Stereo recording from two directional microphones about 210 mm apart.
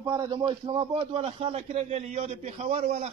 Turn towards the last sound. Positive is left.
turn(degrees=-30)  # may be behind; listen again after turning